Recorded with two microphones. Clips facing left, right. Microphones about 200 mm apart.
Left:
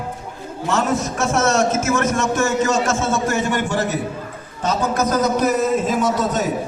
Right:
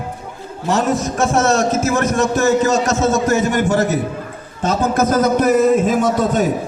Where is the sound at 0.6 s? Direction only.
35° right (ahead or behind); by 6.4 s 55° right (ahead or behind).